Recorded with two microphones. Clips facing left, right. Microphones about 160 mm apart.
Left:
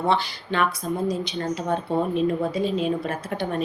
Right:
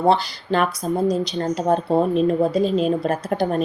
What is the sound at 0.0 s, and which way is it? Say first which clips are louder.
Speech: right 5 dB; 40° right (ahead or behind).